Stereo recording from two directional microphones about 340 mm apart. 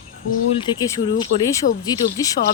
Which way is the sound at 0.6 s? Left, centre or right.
Centre.